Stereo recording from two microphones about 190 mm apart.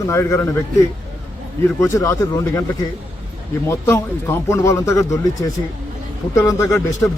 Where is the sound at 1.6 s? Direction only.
15° left (ahead or behind).